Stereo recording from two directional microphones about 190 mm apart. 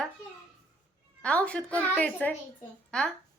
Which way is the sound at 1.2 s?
5° left (ahead or behind).